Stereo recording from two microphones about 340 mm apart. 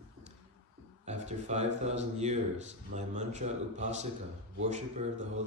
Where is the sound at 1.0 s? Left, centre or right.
Centre.